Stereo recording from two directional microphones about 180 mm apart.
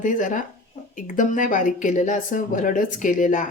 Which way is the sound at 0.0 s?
45° left (ahead or behind).